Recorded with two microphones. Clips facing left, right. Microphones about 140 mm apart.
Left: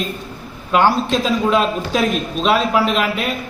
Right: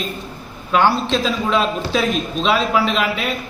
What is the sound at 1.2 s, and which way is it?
Speech, 5° left (ahead or behind).